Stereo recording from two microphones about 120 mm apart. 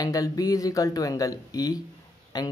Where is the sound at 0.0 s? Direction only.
30° left (ahead or behind).